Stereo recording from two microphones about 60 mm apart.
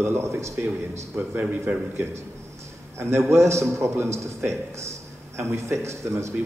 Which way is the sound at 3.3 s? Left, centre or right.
Right.